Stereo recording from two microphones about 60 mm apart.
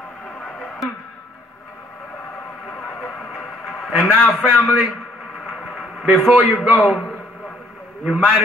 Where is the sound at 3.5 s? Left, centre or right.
Centre.